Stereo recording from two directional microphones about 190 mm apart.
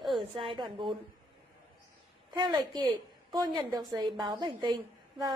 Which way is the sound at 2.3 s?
20° right (ahead or behind).